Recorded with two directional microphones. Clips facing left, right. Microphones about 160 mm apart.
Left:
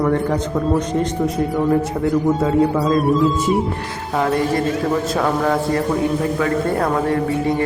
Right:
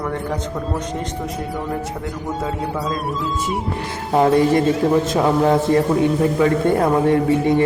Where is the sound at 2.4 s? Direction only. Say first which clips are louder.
Left 8 dB; centre (ahead or behind).